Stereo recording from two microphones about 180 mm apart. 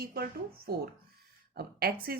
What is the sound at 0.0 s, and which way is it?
A woman's voice, 60° right (ahead or behind).